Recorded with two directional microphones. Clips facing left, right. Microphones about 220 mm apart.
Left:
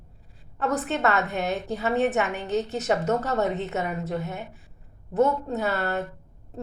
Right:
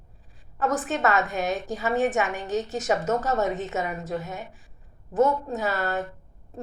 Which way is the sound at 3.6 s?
65° left (ahead or behind).